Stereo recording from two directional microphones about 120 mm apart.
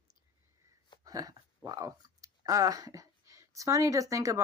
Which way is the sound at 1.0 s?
30° right (ahead or behind).